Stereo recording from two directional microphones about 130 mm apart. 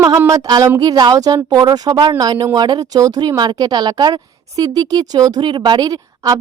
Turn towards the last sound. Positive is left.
turn(degrees=-30)  # may be behind; listen again after turning